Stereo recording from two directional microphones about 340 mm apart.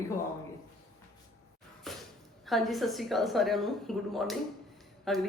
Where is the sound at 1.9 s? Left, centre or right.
Centre.